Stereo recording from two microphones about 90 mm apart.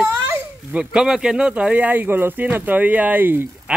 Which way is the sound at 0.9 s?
5° right (ahead or behind).